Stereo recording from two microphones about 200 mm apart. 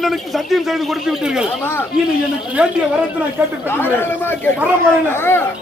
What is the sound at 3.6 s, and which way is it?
Speech, 10° left (ahead or behind).